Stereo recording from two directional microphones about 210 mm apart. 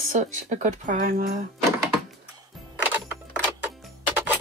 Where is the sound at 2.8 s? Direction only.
5° right (ahead or behind).